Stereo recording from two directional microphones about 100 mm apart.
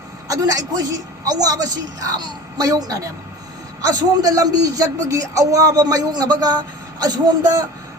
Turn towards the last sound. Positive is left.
turn(degrees=-40)  # may be behind; listen again after turning